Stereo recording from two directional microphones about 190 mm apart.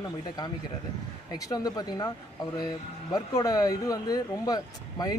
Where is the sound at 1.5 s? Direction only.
20° left (ahead or behind).